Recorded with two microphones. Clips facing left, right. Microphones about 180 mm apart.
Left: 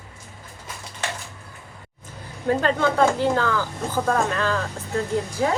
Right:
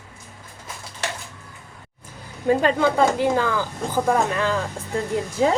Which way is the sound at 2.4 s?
15° right (ahead or behind).